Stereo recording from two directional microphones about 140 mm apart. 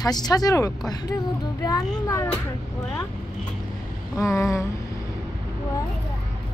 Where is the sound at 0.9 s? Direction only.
25° left (ahead or behind).